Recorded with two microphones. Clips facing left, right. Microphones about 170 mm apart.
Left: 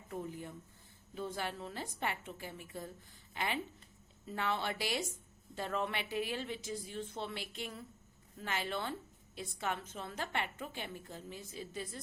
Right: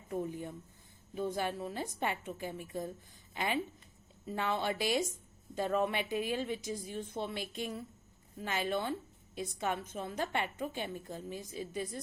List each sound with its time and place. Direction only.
0.3 s a woman's voice: 20° right (ahead or behind)